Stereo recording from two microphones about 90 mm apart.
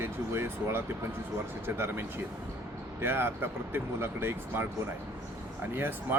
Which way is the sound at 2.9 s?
25° right (ahead or behind).